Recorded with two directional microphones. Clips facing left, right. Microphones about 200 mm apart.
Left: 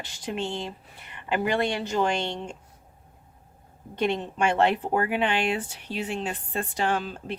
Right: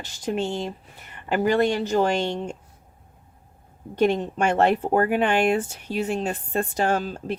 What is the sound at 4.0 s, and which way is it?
Speech, 45° right (ahead or behind).